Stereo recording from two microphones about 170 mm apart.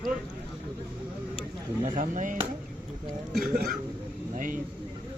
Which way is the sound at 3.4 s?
60° right (ahead or behind).